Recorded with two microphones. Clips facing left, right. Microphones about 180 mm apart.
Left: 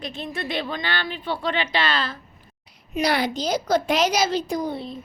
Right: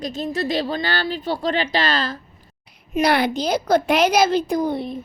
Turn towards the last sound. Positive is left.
turn(degrees=-60)  # may be behind; listen again after turning